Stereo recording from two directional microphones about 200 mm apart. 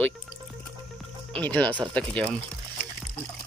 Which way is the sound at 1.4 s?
10° left (ahead or behind).